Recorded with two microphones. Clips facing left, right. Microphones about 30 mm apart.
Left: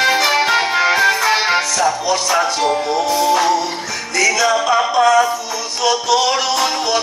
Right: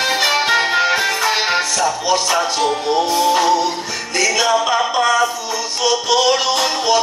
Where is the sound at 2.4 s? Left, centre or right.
Centre.